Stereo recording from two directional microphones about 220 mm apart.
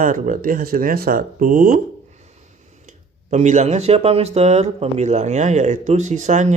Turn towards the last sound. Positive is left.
turn(degrees=-35)  # may be behind; listen again after turning